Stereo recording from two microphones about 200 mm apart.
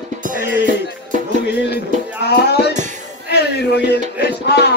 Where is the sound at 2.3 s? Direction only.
55° left (ahead or behind).